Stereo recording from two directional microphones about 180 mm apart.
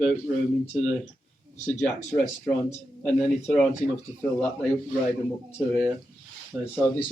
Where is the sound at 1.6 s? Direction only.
5° left (ahead or behind).